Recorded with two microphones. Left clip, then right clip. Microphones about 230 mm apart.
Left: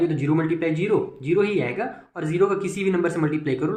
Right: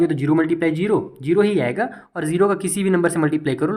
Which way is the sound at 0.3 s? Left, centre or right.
Right.